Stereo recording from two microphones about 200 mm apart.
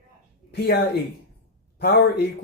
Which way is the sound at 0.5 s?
50° left (ahead or behind).